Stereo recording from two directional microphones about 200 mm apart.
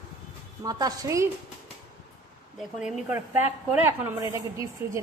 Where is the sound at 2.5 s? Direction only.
Centre (ahead or behind).